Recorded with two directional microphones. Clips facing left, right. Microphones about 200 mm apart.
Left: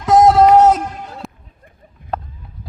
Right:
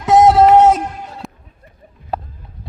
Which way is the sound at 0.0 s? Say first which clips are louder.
Even; 5° right (ahead or behind).